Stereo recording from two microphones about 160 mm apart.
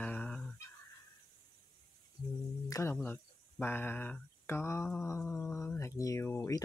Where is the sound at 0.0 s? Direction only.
5° left (ahead or behind).